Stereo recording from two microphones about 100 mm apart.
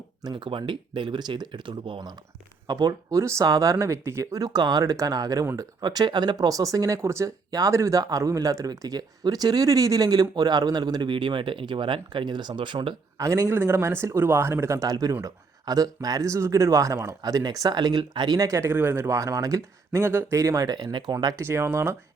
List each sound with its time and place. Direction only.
0.2 s speech: 50° right (ahead or behind)
2.6 s speech: 40° right (ahead or behind)
13.1 s speech: 30° right (ahead or behind); by 18.3 s 50° right (ahead or behind)
18.3 s speech: 35° right (ahead or behind)
21.3 s speech: 30° right (ahead or behind)